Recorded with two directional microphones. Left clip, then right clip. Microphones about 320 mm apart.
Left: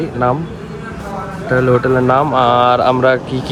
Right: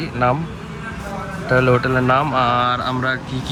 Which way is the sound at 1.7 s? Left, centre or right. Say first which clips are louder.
Left 7 dB; centre.